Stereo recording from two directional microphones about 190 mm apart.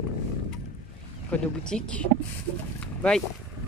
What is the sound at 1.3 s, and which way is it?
Speech, 5° left (ahead or behind).